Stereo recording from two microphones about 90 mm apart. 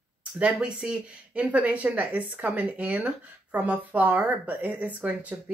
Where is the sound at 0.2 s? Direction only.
10° right (ahead or behind).